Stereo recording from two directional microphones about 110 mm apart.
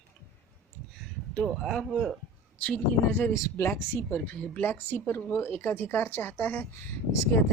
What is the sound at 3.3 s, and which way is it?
Speech, 25° left (ahead or behind).